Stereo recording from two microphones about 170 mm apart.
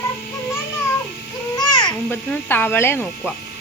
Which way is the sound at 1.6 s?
25° left (ahead or behind).